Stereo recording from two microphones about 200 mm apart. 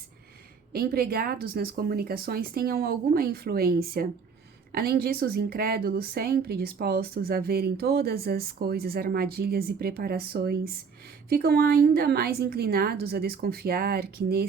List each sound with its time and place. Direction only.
0.7 s a woman's voice: 50° right (ahead or behind)